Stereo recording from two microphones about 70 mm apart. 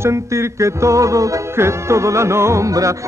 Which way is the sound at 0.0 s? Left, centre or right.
Right.